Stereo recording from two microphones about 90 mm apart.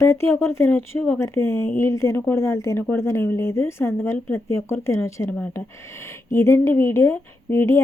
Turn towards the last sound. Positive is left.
turn(degrees=30)  # may be behind; listen again after turning